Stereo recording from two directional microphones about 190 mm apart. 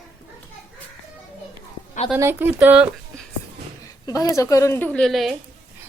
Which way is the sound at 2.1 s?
10° right (ahead or behind).